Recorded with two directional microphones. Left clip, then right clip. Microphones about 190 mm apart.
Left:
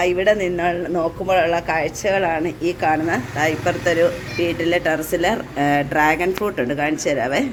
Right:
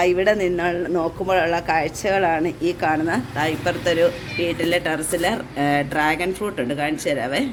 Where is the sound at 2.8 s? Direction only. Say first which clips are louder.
Left 3 dB; centre (ahead or behind).